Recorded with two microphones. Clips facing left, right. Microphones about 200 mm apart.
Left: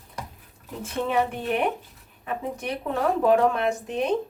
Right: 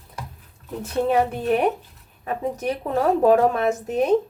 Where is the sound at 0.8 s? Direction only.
40° right (ahead or behind).